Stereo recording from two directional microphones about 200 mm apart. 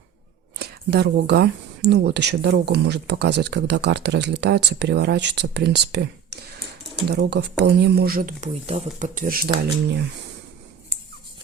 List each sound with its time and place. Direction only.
0.6 s speech: 55° right (ahead or behind)